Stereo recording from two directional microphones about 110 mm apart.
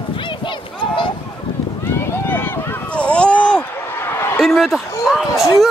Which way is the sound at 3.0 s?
10° left (ahead or behind).